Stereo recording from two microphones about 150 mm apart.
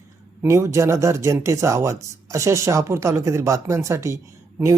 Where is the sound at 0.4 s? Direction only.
20° right (ahead or behind).